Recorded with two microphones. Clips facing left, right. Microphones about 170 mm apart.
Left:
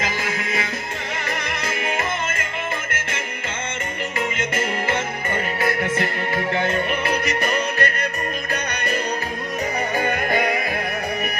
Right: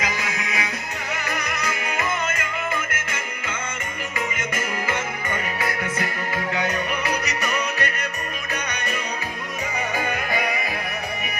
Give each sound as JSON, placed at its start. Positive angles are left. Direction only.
{"t": 0.3, "sound": "music", "side_deg": 50}
{"t": 5.8, "sound": "music", "side_deg": 25}
{"t": 10.3, "sound": "music", "side_deg": 45}